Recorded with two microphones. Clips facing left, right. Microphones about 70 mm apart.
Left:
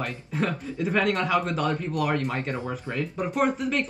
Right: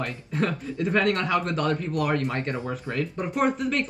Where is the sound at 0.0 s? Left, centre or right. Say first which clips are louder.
Right 1 dB; centre.